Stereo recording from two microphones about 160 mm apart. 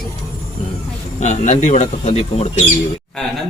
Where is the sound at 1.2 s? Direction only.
45° left (ahead or behind).